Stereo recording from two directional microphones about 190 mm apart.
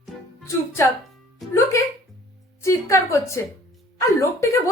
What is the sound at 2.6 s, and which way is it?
A woman's voice, 15° left (ahead or behind).